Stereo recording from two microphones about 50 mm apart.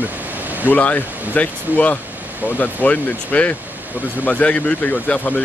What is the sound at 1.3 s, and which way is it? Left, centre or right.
Speech, left.